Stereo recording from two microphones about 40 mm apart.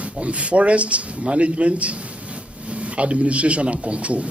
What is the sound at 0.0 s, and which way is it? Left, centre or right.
Speech, right.